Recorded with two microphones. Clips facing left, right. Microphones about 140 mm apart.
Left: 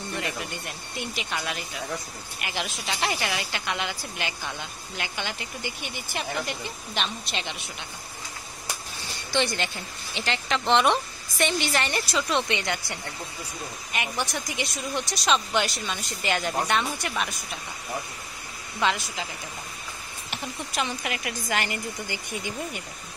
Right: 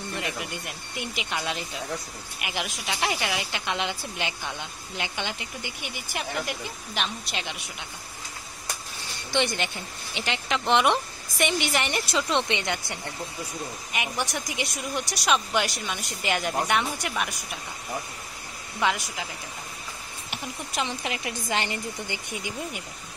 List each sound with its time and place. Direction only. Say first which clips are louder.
0.2 s speech: even; 15° right (ahead or behind)
9.3 s a woman's voice: even; 20° right (ahead or behind)
18.8 s speech: even; 15° right (ahead or behind)
20.2 s a woman's voice: left 1 dB; 20° right (ahead or behind)